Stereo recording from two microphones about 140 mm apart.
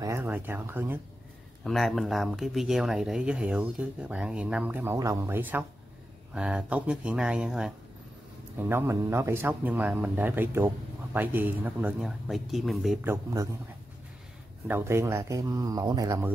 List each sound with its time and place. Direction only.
0.0 s speech: 15° right (ahead or behind)
1.6 s speech: centre (ahead or behind)
4.9 s speech: 25° right (ahead or behind); by 7.7 s 5° right (ahead or behind)
8.5 s speech: 15° right (ahead or behind)
13.0 s speech: 20° right (ahead or behind)
14.7 s speech: 20° right (ahead or behind)